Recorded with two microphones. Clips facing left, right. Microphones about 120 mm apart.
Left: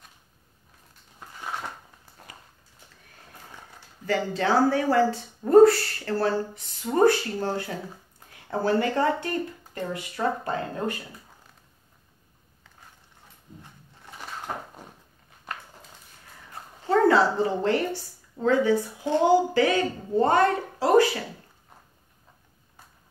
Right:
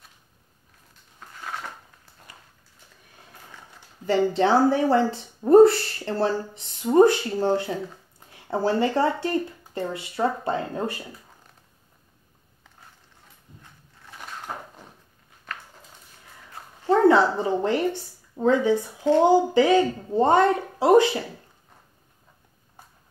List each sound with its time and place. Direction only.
4.0 s speech: 25° right (ahead or behind)
16.8 s a sound: 20° right (ahead or behind)
18.4 s speech: 20° right (ahead or behind)